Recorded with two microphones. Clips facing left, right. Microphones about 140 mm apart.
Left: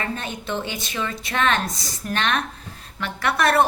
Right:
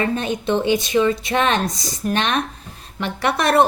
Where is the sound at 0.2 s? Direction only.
20° right (ahead or behind).